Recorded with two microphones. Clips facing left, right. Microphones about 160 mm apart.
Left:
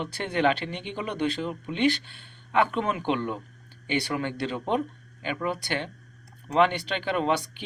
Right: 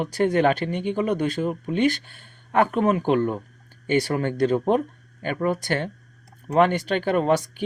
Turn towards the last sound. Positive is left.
turn(degrees=-45)  # may be behind; listen again after turning